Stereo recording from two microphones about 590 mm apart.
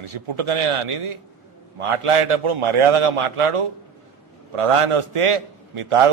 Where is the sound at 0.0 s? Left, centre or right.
Right.